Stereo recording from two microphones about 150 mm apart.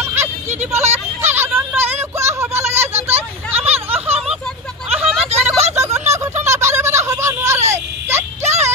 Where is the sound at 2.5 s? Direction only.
45° right (ahead or behind).